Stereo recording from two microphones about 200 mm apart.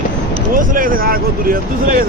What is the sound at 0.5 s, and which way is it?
Speech, 40° right (ahead or behind).